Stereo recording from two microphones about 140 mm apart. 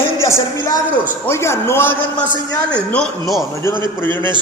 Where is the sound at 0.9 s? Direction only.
15° left (ahead or behind).